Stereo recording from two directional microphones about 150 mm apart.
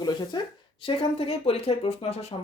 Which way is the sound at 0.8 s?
40° left (ahead or behind).